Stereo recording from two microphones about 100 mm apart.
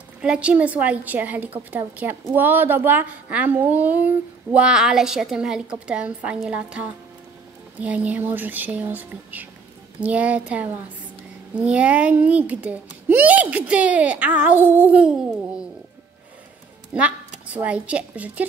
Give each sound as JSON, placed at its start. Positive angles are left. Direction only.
{"t": 0.2, "sound": "a woman's voice", "side_deg": -10}
{"t": 16.9, "sound": "a woman's voice", "side_deg": -10}